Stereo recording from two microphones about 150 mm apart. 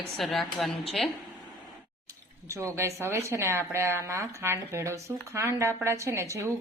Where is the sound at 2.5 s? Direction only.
20° right (ahead or behind).